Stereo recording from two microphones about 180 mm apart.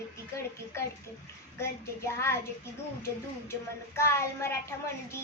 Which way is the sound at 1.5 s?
15° left (ahead or behind).